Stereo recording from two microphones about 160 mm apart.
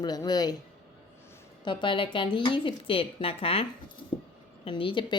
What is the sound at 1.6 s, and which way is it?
A woman's voice, 30° left (ahead or behind).